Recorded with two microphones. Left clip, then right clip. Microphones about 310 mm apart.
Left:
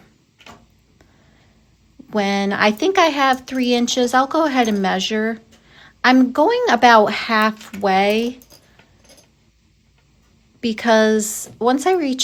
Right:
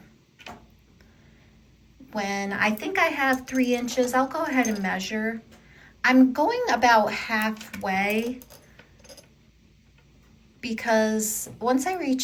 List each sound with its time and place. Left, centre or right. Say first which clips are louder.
2.1 s speech: left 8 dB; centre
10.6 s speech: left 8 dB; centre